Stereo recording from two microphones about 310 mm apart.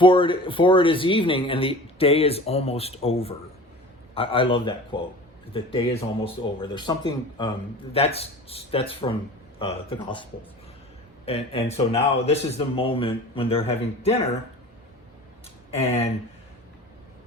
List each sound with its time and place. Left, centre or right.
0.0 s speech: centre
11.3 s speech: centre
15.7 s speech: centre